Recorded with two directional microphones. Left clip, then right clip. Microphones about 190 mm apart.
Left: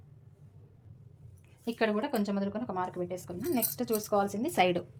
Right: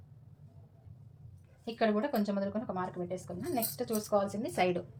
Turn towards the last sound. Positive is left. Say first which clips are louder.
# left 4 dB
turn(degrees=60)  # may be behind; listen again after turning